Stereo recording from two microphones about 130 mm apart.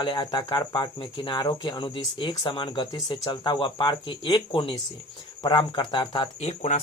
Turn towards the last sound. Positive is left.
turn(degrees=40)  # may be behind; listen again after turning